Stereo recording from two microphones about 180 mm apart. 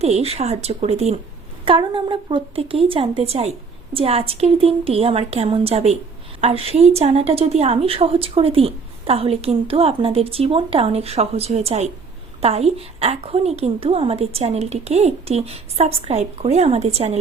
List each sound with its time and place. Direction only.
0.0 s a woman's voice: 35° right (ahead or behind)